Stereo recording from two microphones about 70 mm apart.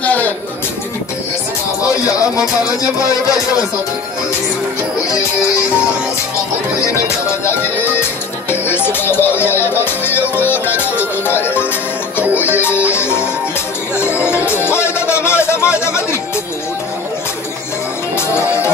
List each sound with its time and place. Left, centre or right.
0.0 s a sound: left
6.9 s music: left
14.1 s music: centre
14.4 s music: left
18.1 s music: left